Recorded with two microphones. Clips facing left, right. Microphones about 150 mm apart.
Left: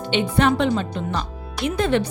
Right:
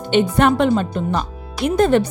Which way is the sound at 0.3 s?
50° right (ahead or behind).